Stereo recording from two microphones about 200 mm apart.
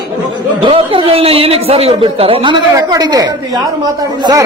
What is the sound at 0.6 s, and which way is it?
A man's voice, 25° right (ahead or behind).